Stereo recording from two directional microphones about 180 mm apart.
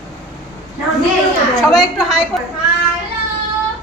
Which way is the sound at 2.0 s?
Centre (ahead or behind).